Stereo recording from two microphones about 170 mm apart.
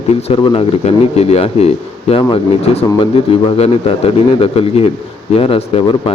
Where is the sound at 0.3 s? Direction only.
35° left (ahead or behind).